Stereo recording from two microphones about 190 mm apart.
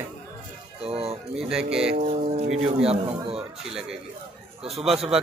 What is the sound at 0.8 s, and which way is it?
Speech, 30° right (ahead or behind).